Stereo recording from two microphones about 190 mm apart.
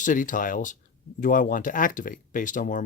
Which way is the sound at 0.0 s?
45° left (ahead or behind).